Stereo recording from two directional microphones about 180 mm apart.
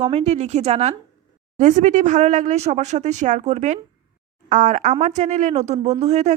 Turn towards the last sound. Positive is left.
turn(degrees=-40)  # may be behind; listen again after turning